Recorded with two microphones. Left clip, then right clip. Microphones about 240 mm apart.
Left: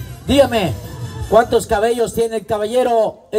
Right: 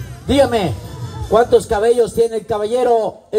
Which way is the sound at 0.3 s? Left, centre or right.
Left.